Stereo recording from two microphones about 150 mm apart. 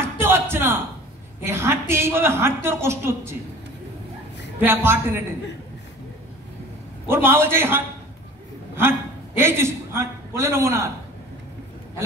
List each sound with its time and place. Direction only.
0.0 s a sound: 15° right (ahead or behind)
1.4 s a woman's voice: 15° right (ahead or behind)
4.6 s a woman's voice: 15° right (ahead or behind)
7.1 s a woman's voice: 15° right (ahead or behind)
9.4 s a woman's voice: 15° right (ahead or behind)